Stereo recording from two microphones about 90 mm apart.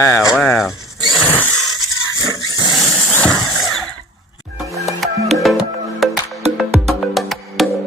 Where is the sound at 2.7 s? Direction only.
Centre (ahead or behind).